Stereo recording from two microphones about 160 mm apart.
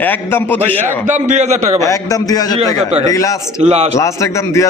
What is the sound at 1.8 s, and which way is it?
Speech, 20° left (ahead or behind).